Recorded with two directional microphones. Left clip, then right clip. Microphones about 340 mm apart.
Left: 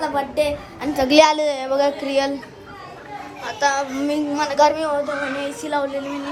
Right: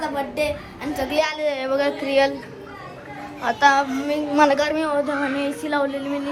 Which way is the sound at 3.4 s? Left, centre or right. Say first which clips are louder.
Right 4 dB; centre.